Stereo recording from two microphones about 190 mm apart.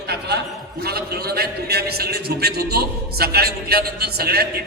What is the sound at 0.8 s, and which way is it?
A man's voice, 55° right (ahead or behind).